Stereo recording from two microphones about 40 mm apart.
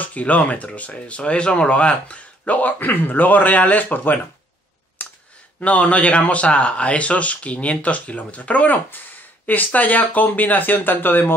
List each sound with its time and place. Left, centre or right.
0.0 s speech: left
5.0 s a sound: left
5.6 s speech: left